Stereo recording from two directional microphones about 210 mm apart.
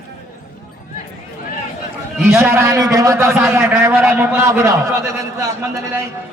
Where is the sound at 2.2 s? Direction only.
5° right (ahead or behind).